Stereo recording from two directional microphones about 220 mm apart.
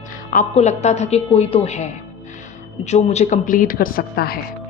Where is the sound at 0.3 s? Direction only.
35° left (ahead or behind).